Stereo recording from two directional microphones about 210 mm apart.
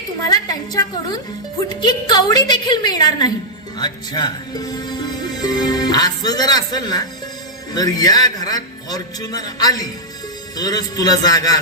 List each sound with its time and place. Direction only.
0.3 s a woman's voice: 20° left (ahead or behind)